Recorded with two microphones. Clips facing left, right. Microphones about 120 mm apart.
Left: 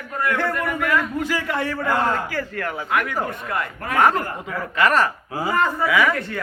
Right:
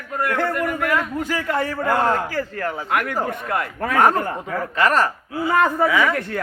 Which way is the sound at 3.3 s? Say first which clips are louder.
Right 2 dB; 60° right (ahead or behind).